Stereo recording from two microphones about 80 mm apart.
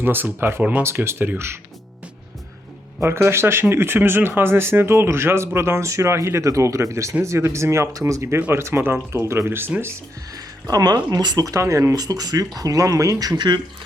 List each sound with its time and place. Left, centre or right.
0.0 s speech: right
3.0 s speech: right
10.3 s speech: right
11.9 s speech: right